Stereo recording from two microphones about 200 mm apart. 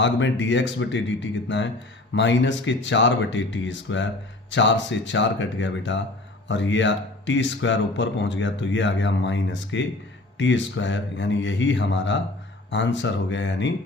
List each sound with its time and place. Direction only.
0.0 s speech: 65° left (ahead or behind)